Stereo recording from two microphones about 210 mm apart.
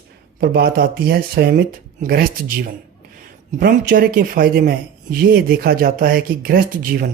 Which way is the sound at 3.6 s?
45° right (ahead or behind).